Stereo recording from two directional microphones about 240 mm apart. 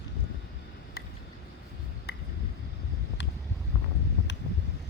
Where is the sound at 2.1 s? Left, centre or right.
Left.